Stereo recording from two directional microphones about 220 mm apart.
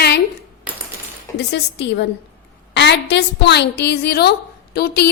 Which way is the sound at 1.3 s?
50° left (ahead or behind).